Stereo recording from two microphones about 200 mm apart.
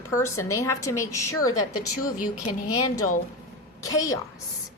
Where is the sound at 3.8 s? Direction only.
15° left (ahead or behind).